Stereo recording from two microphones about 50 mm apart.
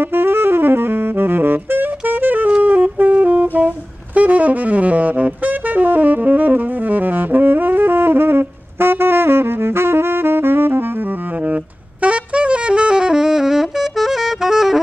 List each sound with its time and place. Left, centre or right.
0.0 s saxophone: right
2.6 s music: right
3.5 s saxophone: right
11.5 s saxophone: right; by 14.8 s centre